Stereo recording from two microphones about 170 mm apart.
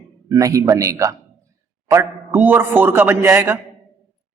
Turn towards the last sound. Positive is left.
turn(degrees=-15)  # may be behind; listen again after turning